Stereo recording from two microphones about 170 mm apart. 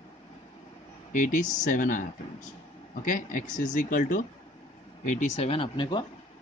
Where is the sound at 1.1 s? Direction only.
50° left (ahead or behind).